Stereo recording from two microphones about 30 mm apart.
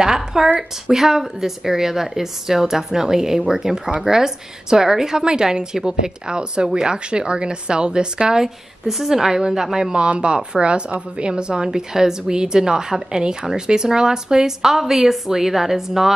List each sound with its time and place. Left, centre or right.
0.0 s a sound: centre
0.6 s a woman's voice: centre
8.8 s a woman's voice: centre
9.1 s a woman's voice: centre
10.2 s a woman's voice: right; by 16.1 s centre